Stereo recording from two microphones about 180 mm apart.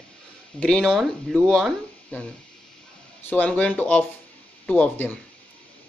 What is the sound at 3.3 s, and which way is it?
Speech, 10° left (ahead or behind).